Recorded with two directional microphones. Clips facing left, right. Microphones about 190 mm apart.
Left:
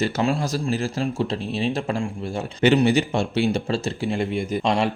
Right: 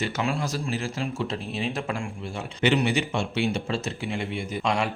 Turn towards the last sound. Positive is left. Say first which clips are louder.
# left 5 dB
turn(degrees=40)  # may be behind; listen again after turning